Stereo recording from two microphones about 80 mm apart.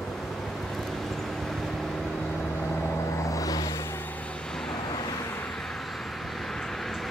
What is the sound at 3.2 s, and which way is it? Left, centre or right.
Vehicle, left.